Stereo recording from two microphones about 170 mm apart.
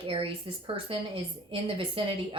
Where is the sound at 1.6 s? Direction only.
30° right (ahead or behind).